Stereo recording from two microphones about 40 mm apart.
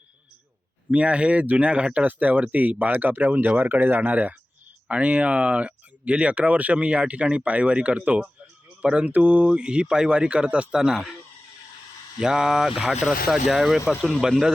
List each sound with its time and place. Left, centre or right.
0.9 s speech: right
4.9 s speech: right
10.8 s speech: centre
12.2 s speech: centre